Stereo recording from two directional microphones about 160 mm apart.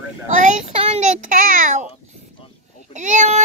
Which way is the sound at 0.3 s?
50° right (ahead or behind).